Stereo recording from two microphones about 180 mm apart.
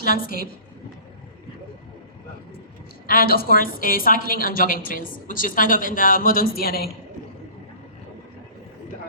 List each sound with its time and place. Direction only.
0.0 s a woman's voice: 50° left (ahead or behind)
3.1 s a woman's voice: 55° left (ahead or behind)